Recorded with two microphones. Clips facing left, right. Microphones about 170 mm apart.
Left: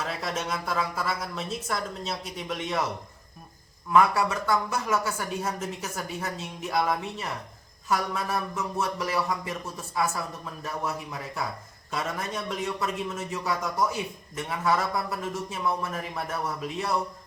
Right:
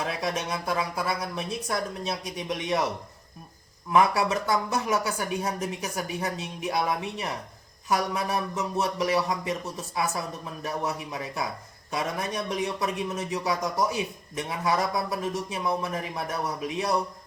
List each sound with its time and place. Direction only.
0.1 s a man's voice: 15° right (ahead or behind)
3.9 s a man's voice: 20° right (ahead or behind)